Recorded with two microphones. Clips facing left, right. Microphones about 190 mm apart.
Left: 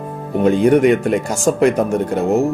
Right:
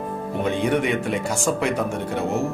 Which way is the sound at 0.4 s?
45° left (ahead or behind).